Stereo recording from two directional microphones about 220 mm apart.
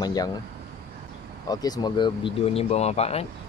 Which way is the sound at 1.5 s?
15° left (ahead or behind).